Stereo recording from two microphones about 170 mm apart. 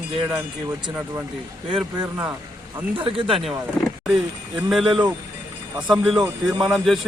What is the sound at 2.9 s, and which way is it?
Speech, 30° right (ahead or behind).